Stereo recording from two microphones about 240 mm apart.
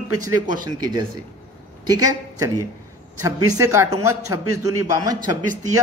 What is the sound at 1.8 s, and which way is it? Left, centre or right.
Speech, centre.